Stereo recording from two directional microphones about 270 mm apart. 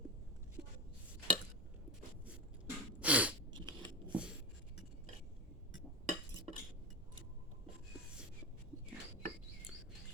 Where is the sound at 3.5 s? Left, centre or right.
Centre.